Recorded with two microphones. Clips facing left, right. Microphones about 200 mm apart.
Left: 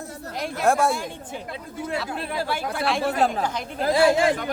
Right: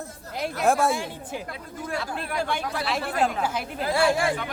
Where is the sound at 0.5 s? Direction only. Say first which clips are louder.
Left 1 dB; centre (ahead or behind).